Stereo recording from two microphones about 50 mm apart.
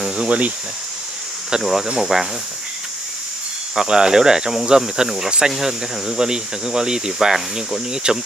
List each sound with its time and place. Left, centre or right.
0.1 s speech: right
1.5 s speech: centre
3.7 s speech: centre